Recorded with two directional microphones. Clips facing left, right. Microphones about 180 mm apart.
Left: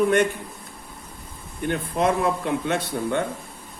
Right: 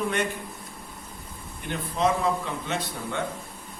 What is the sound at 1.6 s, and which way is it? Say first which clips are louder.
A man's voice: left 3 dB; 60° left (ahead or behind).